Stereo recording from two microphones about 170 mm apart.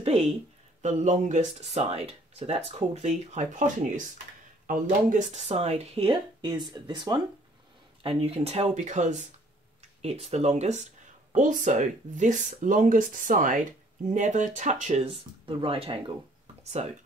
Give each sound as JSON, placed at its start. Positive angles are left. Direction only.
{"t": 0.0, "sound": "speech", "side_deg": -40}
{"t": 15.0, "sound": "speech", "side_deg": -30}